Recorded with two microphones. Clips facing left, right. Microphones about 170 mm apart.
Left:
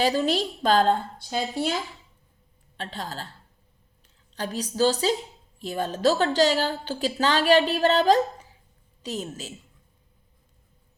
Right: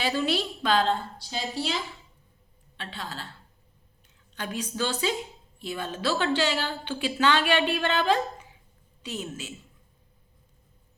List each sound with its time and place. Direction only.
0.0 s a woman's voice: 40° left (ahead or behind)
4.4 s a woman's voice: 35° left (ahead or behind)